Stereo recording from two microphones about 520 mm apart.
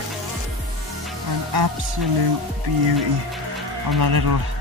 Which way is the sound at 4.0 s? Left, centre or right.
Right.